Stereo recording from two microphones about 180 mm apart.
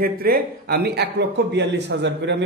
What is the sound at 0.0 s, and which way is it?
A man's voice, 55° right (ahead or behind).